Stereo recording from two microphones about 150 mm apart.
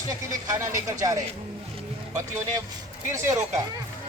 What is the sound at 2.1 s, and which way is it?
Speech, 20° right (ahead or behind).